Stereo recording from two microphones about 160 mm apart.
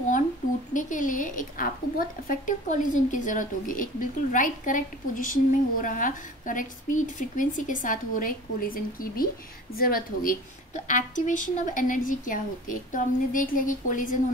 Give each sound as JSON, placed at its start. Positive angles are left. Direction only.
{"t": 0.7, "sound": "a woman's voice", "side_deg": 55}
{"t": 10.9, "sound": "a woman's voice", "side_deg": 50}